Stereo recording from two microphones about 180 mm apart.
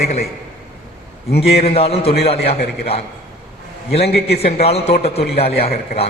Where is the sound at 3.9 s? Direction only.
65° left (ahead or behind).